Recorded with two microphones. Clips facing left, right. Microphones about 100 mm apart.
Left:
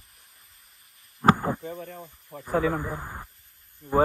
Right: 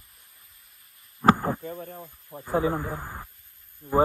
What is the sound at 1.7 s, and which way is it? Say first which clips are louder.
Speech: even; 30° right (ahead or behind).